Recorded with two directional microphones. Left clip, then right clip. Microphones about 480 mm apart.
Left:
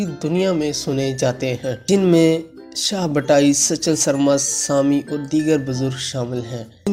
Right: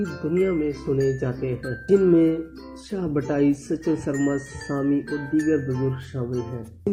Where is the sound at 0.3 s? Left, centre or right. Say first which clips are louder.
Left 3 dB; left.